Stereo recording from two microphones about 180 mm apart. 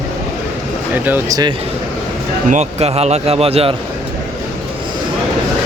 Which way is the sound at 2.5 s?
35° right (ahead or behind).